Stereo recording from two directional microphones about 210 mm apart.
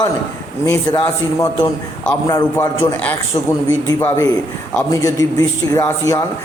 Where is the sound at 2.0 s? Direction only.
10° left (ahead or behind).